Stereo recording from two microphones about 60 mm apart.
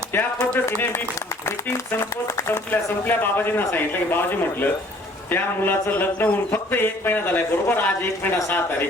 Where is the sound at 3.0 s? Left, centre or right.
Left.